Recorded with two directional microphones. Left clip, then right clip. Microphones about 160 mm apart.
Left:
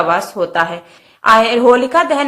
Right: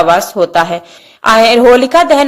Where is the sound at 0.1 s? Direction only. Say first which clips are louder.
Right 6 dB; 30° right (ahead or behind).